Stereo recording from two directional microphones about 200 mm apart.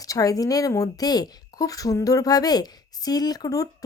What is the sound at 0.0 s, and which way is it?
A woman's voice, 15° left (ahead or behind).